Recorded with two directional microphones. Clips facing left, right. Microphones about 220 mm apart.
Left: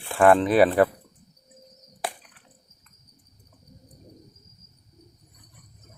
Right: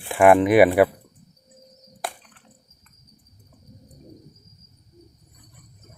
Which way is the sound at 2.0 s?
Centre (ahead or behind).